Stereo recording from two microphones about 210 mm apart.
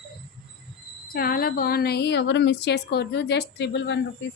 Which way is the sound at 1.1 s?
45° left (ahead or behind).